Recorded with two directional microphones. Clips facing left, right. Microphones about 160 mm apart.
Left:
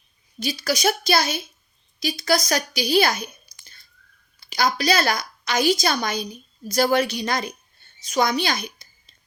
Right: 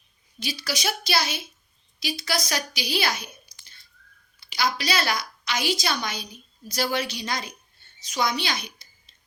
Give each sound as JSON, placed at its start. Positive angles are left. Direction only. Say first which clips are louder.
{"t": 0.3, "sound": "a woman's voice", "louder": "left 6 dB", "side_deg": 45}